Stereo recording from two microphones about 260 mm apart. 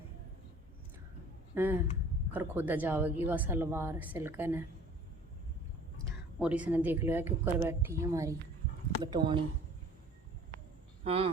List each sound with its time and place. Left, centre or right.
1.5 s a woman's voice: centre
6.4 s a woman's voice: centre
11.0 s speech: right